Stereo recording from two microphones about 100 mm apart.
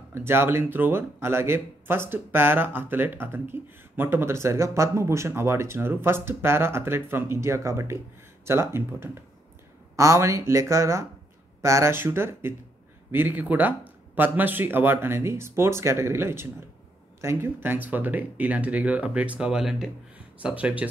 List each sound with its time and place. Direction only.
0.1 s speech: 25° right (ahead or behind)